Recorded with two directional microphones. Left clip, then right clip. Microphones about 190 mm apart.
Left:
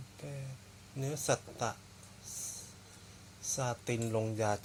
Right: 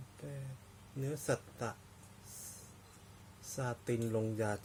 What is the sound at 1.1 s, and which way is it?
Speech, 20° right (ahead or behind).